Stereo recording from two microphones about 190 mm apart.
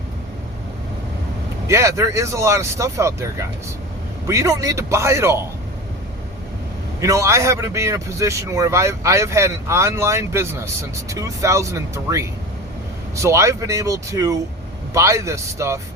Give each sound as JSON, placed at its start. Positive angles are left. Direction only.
{"t": 1.6, "sound": "a man's voice", "side_deg": -15}
{"t": 7.0, "sound": "a man's voice", "side_deg": -15}